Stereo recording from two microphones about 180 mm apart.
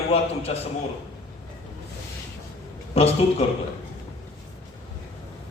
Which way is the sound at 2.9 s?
35° left (ahead or behind).